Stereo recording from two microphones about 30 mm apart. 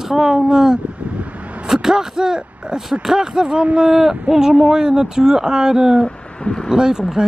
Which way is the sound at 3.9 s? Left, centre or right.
Centre.